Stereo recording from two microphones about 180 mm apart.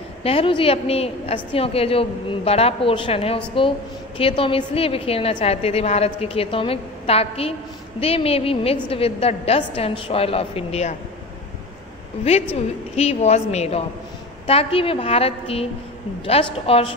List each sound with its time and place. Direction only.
0.2 s a woman's voice: 30° left (ahead or behind)
12.9 s a woman's voice: 35° left (ahead or behind)